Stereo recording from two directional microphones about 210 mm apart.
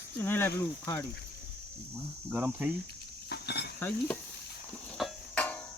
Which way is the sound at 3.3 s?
50° left (ahead or behind).